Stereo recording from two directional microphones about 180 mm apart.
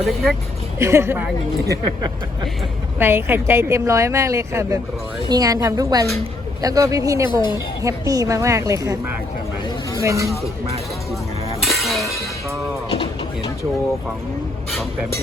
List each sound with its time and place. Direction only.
0.0 s speech: centre (ahead or behind)
0.8 s a woman's voice: 15° right (ahead or behind)
3.0 s a woman's voice: 10° right (ahead or behind)
11.6 s music: centre (ahead or behind)